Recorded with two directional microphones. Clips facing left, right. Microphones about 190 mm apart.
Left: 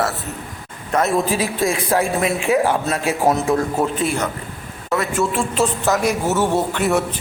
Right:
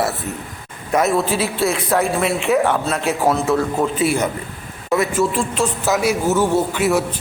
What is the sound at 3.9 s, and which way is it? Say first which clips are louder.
A man's voice: right 3 dB; 5° right (ahead or behind).